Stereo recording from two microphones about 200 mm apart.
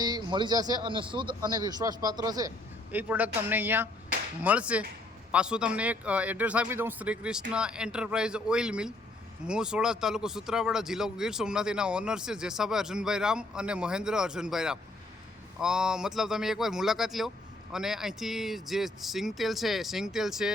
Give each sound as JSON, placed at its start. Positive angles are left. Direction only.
{"t": 0.0, "sound": "speech", "side_deg": -20}
{"t": 2.9, "sound": "speech", "side_deg": -10}